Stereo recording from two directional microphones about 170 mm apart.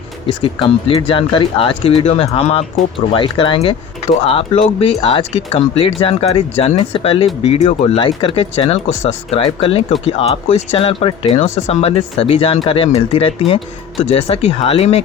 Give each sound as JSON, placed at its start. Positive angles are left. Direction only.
{"t": 0.3, "sound": "speech", "side_deg": 30}
{"t": 7.9, "sound": "speech", "side_deg": 30}